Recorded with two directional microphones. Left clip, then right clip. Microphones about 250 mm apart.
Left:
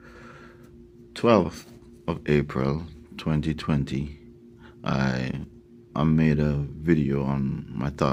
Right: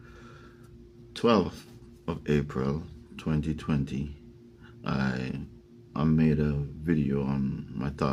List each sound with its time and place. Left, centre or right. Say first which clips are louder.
1.1 s speech: left 4 dB; left